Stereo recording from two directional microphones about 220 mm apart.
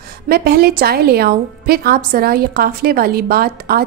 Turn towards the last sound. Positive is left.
turn(degrees=-45)  # may be behind; listen again after turning